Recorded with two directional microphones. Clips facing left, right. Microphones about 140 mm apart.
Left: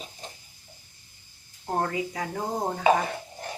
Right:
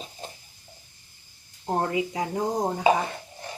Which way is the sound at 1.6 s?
20° right (ahead or behind).